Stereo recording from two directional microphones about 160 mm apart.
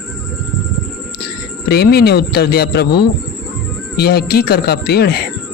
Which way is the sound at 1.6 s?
90° left.